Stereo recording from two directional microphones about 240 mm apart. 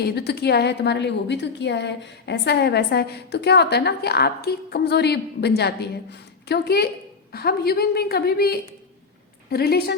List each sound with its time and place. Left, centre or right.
0.0 s a woman's voice: left